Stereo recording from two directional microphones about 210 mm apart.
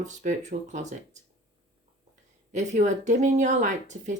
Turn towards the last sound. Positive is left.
turn(degrees=-35)  # may be behind; listen again after turning